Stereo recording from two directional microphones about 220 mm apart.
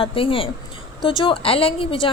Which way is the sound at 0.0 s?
25° left (ahead or behind).